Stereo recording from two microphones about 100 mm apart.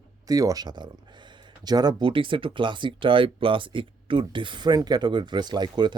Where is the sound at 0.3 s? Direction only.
35° right (ahead or behind).